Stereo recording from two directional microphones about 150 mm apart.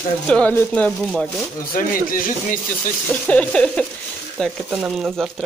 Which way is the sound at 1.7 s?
65° left (ahead or behind).